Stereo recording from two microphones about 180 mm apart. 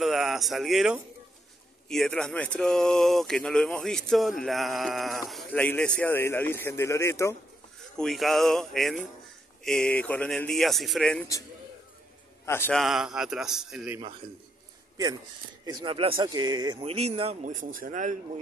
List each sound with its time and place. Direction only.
0.0 s speech: centre (ahead or behind); by 7.3 s 15° left (ahead or behind)
8.0 s speech: centre (ahead or behind)
12.4 s a man's voice: 15° left (ahead or behind)
12.7 s speech: centre (ahead or behind)
15.6 s speech: 25° right (ahead or behind); by 18.1 s 45° right (ahead or behind)